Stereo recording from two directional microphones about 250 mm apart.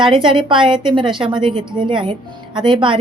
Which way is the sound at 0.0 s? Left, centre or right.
Centre.